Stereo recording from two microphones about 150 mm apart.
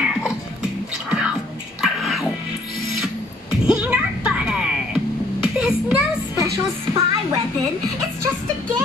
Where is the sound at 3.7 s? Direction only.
5° right (ahead or behind).